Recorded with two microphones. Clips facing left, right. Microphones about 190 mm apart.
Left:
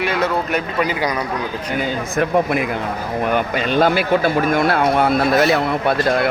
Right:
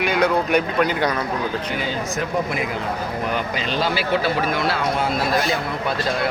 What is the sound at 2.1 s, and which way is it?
A man's voice, 55° left (ahead or behind).